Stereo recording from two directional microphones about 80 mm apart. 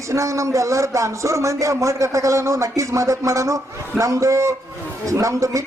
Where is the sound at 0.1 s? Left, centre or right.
Right.